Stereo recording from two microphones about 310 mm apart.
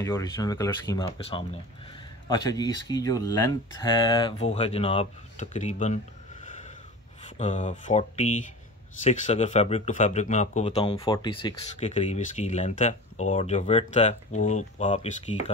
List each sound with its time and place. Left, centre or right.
0.0 s speech: centre
7.3 s speech: left